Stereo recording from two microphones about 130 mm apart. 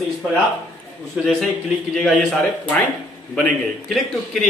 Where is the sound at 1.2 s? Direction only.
Centre (ahead or behind).